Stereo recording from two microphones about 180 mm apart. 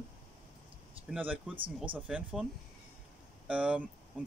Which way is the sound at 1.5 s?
30° right (ahead or behind).